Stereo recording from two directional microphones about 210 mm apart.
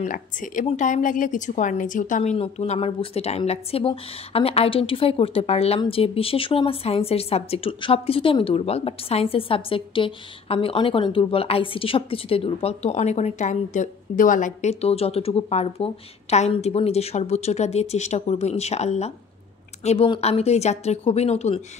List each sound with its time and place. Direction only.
0.0 s a woman's voice: 40° left (ahead or behind)